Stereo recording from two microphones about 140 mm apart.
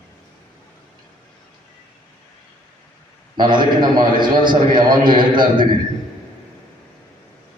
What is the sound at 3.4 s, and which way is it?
A man's voice, 30° right (ahead or behind).